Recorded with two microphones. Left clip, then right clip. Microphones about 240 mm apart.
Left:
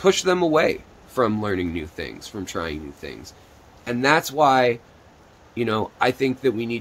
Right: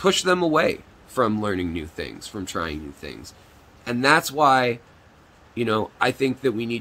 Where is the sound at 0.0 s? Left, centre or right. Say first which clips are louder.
Left 1 dB; centre.